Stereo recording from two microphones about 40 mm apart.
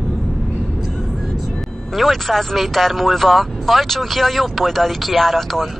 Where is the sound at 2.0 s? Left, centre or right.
Centre.